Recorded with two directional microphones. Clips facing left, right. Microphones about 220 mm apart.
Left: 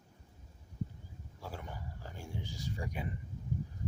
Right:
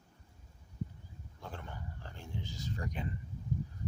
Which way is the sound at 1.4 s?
10° left (ahead or behind).